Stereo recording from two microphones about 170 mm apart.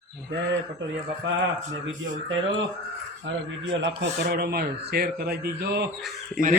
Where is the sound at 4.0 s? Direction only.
70° right (ahead or behind).